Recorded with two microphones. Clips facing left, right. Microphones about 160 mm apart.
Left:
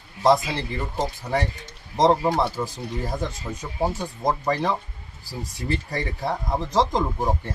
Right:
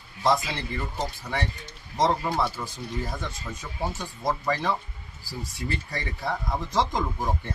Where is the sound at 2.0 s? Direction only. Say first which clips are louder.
Left 5 dB; 30° left (ahead or behind).